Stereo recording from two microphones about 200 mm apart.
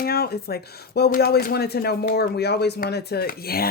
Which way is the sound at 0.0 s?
50° left (ahead or behind).